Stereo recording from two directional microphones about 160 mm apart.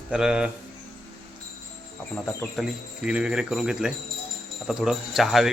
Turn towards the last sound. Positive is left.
turn(degrees=0)  # may be behind; listen again after turning